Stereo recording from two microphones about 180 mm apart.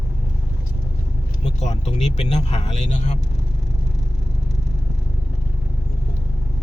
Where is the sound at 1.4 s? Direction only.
40° left (ahead or behind).